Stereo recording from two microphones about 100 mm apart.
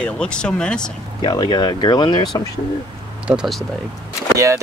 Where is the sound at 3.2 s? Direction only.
5° right (ahead or behind).